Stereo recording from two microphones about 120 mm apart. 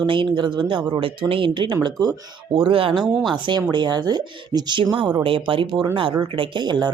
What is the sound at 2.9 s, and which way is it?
Speech, 5° right (ahead or behind).